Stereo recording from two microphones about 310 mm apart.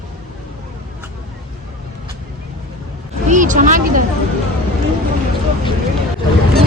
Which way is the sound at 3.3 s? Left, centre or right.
Right.